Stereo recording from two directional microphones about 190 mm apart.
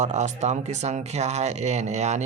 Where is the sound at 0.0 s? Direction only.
35° right (ahead or behind).